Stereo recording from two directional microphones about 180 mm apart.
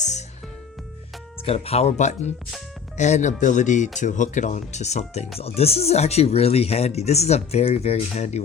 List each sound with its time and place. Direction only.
0.0 s music: 40° left (ahead or behind)
1.5 s speech: 35° left (ahead or behind)